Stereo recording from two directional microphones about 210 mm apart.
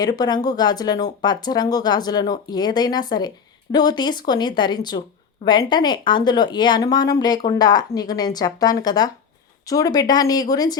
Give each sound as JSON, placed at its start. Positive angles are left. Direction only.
{"t": 0.0, "sound": "speech", "side_deg": 20}